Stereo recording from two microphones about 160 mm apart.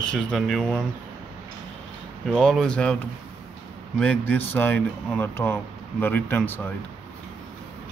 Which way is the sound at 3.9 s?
10° left (ahead or behind).